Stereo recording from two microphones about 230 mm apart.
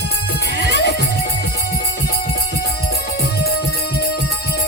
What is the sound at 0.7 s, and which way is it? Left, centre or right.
Music, left.